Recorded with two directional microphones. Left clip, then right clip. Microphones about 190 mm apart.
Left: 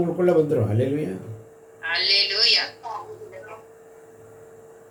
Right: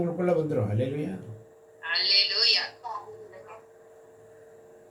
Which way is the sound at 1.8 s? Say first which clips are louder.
Left 3 dB; 40° left (ahead or behind).